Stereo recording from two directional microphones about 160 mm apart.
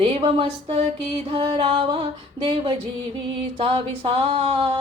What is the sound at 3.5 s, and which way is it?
Speech, 35° right (ahead or behind).